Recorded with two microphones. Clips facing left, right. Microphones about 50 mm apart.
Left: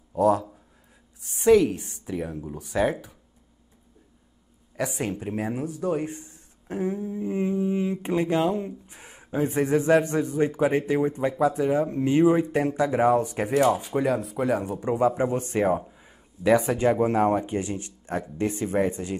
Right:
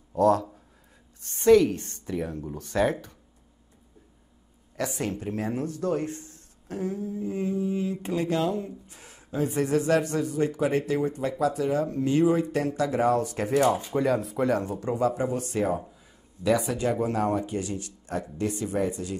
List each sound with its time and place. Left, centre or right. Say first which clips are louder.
0.1 s speech: even; centre
4.7 s speech: left 1 dB; centre
14.1 s speech: even; centre; by 19.1 s left